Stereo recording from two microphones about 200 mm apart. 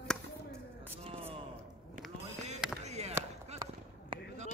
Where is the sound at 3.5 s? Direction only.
35° right (ahead or behind).